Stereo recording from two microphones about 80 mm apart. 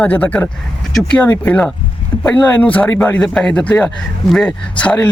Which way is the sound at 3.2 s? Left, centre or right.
Centre.